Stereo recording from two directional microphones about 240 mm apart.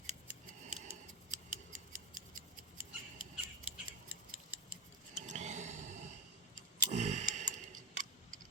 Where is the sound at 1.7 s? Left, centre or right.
Right.